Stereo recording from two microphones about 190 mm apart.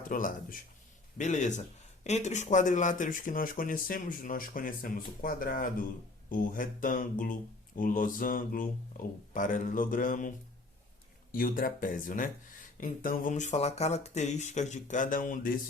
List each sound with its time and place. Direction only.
0.1 s speech: 45° left (ahead or behind)